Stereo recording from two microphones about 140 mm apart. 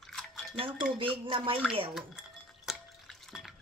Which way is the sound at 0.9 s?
40° right (ahead or behind).